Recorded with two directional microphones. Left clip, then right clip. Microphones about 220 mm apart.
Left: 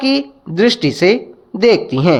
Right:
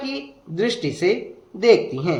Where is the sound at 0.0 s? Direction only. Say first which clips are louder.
Left 13 dB; 40° left (ahead or behind).